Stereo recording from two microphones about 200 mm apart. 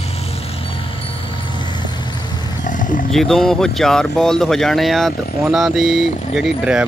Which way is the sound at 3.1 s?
Centre (ahead or behind).